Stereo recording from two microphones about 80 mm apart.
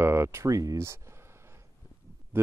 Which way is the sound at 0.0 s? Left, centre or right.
Right.